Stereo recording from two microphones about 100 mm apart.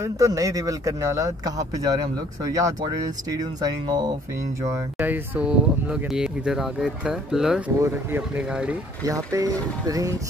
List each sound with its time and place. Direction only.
0.0 s speech: 35° right (ahead or behind)
4.9 s speech: 20° right (ahead or behind)
7.9 s speech: 20° right (ahead or behind)
8.5 s speech: 10° right (ahead or behind)
9.0 s speech: 35° right (ahead or behind)